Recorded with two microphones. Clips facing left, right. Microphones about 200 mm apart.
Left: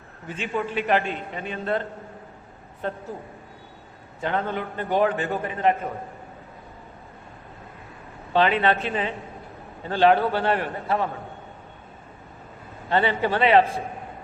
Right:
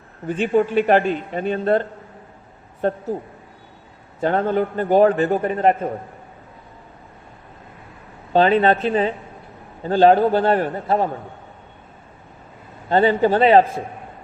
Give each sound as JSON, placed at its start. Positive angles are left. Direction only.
{"t": 0.4, "sound": "a man's voice", "side_deg": -45}
{"t": 4.2, "sound": "a man's voice", "side_deg": -40}
{"t": 8.3, "sound": "a man's voice", "side_deg": -40}
{"t": 12.9, "sound": "a man's voice", "side_deg": -40}